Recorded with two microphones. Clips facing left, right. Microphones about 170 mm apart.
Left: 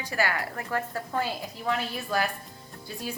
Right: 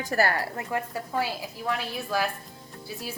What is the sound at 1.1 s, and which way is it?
A woman's voice, 5° right (ahead or behind).